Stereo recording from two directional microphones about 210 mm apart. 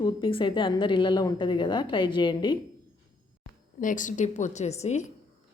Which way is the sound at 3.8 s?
40° left (ahead or behind).